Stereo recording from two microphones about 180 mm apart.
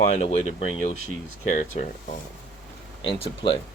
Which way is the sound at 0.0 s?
35° left (ahead or behind).